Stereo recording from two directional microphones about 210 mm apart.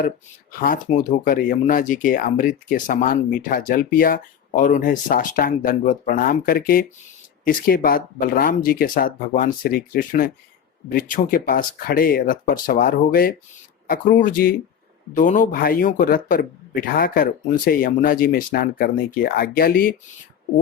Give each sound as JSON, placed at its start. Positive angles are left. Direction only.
{"t": 0.6, "sound": "speech", "side_deg": 40}